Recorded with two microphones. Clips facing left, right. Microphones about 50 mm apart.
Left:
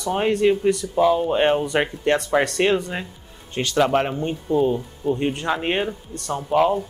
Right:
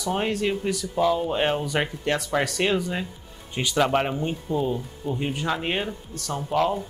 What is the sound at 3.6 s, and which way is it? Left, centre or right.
Speech, centre.